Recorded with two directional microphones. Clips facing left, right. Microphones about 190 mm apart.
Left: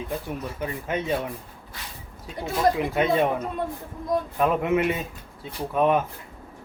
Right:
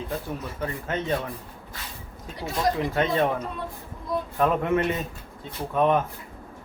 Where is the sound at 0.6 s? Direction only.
10° left (ahead or behind).